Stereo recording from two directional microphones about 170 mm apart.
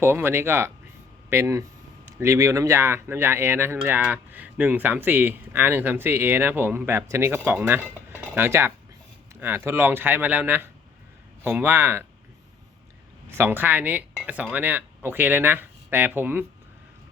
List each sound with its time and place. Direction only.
0.0 s speech: 15° right (ahead or behind)
13.3 s speech: 10° right (ahead or behind)